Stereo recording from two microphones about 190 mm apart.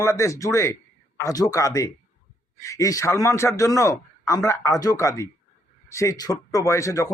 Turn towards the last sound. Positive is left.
turn(degrees=15)  # may be behind; listen again after turning